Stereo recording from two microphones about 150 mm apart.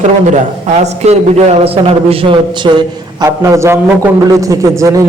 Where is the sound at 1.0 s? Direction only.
45° right (ahead or behind).